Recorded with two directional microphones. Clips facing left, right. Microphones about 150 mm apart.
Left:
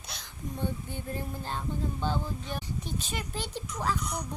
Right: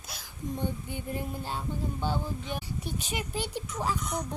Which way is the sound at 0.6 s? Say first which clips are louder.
Left 3 dB; 15° right (ahead or behind).